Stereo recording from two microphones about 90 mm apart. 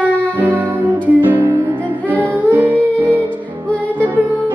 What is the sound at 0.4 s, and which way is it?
Music, 20° right (ahead or behind).